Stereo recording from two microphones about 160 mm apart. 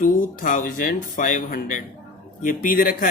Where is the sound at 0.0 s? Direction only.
55° left (ahead or behind).